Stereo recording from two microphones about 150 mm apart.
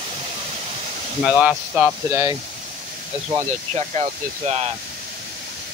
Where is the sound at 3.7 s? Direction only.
50° right (ahead or behind).